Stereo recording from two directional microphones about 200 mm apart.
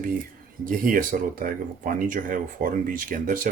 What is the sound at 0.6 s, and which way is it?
Speech, 45° right (ahead or behind).